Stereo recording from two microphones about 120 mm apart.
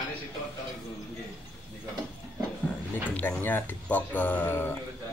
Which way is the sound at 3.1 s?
15° left (ahead or behind).